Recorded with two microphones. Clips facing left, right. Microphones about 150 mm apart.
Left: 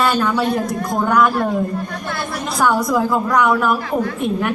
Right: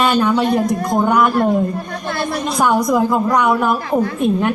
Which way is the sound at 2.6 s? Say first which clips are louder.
Right 1 dB; 15° right (ahead or behind).